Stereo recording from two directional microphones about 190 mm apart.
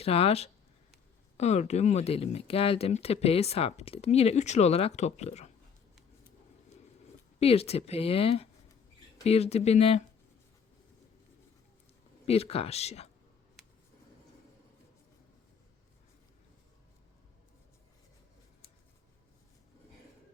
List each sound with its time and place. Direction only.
0.0 s speech: 30° left (ahead or behind)
7.3 s speech: 30° left (ahead or behind)
12.2 s speech: 30° left (ahead or behind)